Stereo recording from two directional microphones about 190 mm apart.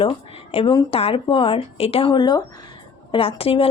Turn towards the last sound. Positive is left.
turn(degrees=30)  # may be behind; listen again after turning